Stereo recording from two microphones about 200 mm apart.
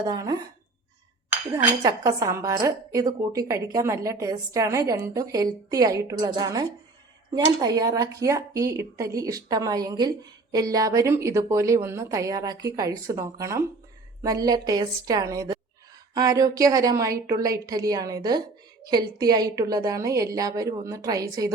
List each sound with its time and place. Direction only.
0.0 s a woman's voice: 20° right (ahead or behind)
1.5 s a woman's voice: 20° right (ahead or behind)